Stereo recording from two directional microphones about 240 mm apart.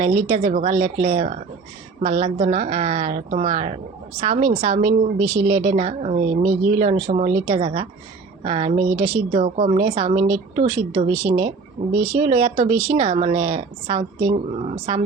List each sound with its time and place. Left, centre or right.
0.0 s a woman's voice: right